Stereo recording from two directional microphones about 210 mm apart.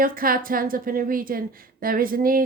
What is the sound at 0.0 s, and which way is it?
A woman's voice, 45° right (ahead or behind).